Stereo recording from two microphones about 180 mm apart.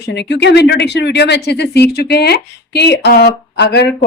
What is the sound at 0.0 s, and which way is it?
Speech, 70° left (ahead or behind).